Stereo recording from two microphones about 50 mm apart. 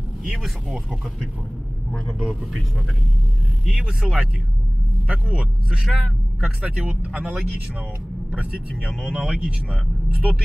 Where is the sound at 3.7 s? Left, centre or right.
Centre.